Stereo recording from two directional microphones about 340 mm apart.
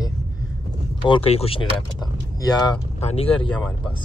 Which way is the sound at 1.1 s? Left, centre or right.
Centre.